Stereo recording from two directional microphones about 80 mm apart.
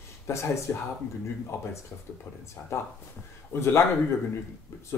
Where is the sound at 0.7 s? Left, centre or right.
Left.